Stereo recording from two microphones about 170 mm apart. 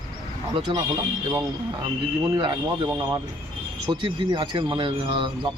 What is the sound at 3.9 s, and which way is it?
Speech, 25° right (ahead or behind).